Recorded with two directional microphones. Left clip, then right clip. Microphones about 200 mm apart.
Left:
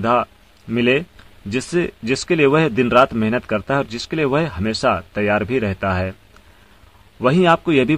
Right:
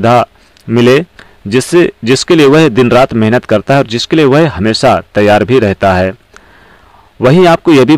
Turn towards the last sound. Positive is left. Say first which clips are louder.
# right 9 dB
turn(degrees=-40)  # may be behind; listen again after turning